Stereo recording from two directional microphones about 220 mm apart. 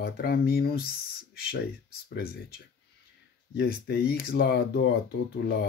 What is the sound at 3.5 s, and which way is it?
Speech, 45° left (ahead or behind).